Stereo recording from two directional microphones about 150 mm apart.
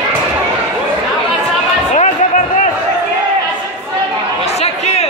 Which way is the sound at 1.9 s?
55° left (ahead or behind).